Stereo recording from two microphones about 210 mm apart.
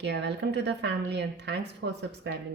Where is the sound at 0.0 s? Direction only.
55° right (ahead or behind).